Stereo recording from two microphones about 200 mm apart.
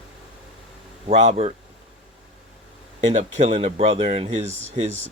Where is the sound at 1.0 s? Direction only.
35° right (ahead or behind).